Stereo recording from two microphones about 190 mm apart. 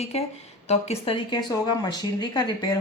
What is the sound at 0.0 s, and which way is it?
Speech, 35° left (ahead or behind).